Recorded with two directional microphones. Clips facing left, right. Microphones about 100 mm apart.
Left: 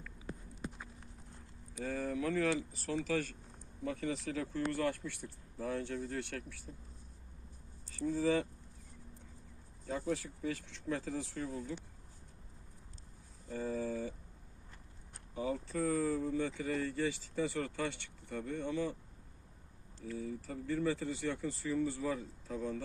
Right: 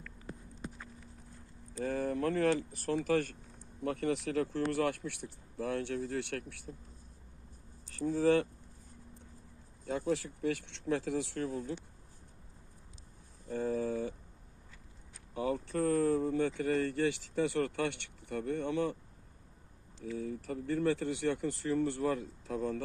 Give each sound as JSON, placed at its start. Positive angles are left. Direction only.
{"t": 1.8, "sound": "speech", "side_deg": -55}
{"t": 7.9, "sound": "speech", "side_deg": -65}
{"t": 9.8, "sound": "speech", "side_deg": -70}
{"t": 13.5, "sound": "speech", "side_deg": -55}
{"t": 15.4, "sound": "speech", "side_deg": -60}
{"t": 20.1, "sound": "speech", "side_deg": -60}